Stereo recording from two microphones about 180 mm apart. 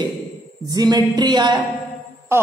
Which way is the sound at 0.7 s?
20° right (ahead or behind).